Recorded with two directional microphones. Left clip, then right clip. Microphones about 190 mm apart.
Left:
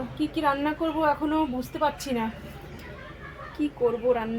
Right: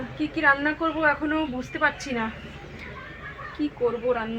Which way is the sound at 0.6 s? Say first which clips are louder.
Right 2 dB; 5° right (ahead or behind).